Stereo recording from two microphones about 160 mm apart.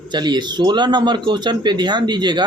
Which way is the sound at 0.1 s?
30° right (ahead or behind).